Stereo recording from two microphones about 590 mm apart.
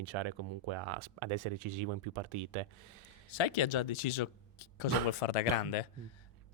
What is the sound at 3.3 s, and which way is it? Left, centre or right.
Speech, left.